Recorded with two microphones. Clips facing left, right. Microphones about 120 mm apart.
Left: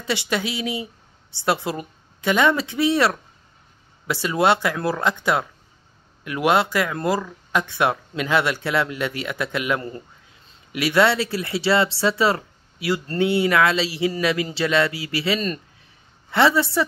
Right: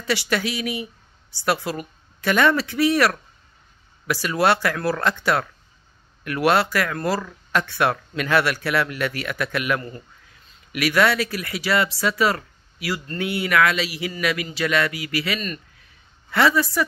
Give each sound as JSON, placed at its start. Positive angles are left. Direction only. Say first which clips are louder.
{"t": 0.0, "sound": "speech", "louder": "right 1 dB", "side_deg": 20}
{"t": 4.1, "sound": "a woman's voice", "louder": "left 1 dB", "side_deg": 20}